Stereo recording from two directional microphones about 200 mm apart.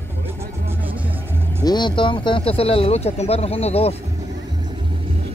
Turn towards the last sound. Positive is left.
turn(degrees=30)  # may be behind; listen again after turning